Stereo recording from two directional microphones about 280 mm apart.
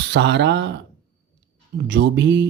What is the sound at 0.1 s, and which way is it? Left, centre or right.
Speech, right.